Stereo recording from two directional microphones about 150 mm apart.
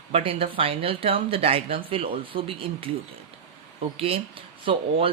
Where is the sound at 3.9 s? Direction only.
40° right (ahead or behind).